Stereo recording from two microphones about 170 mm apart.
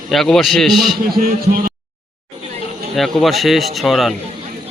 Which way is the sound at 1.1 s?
60° right (ahead or behind).